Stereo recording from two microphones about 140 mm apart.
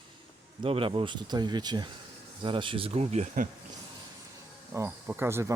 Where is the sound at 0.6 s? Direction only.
40° right (ahead or behind); by 3.4 s 55° right (ahead or behind).